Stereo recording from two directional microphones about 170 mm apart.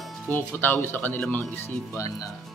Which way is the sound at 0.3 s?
15° left (ahead or behind).